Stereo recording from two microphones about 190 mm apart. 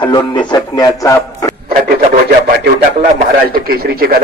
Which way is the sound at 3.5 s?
50° right (ahead or behind).